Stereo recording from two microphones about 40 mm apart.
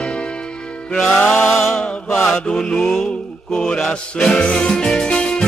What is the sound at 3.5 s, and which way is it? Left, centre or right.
Music, left.